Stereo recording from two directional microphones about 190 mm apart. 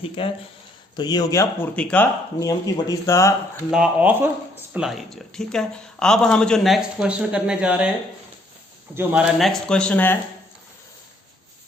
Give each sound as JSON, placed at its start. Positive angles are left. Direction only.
{"t": 0.2, "sound": "speech", "side_deg": 30}
{"t": 2.4, "sound": "speech", "side_deg": 20}
{"t": 3.7, "sound": "speech", "side_deg": -5}
{"t": 9.0, "sound": "speech", "side_deg": -5}